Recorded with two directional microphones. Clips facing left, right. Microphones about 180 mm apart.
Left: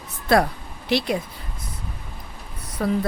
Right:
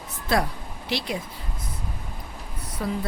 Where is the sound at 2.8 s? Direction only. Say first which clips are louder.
Left 6 dB; 55° left (ahead or behind).